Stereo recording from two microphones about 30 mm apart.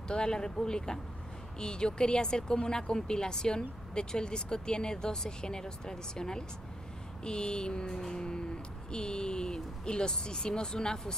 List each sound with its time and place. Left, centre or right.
0.1 s speech: left
7.2 s a sound: left
7.9 s speech: centre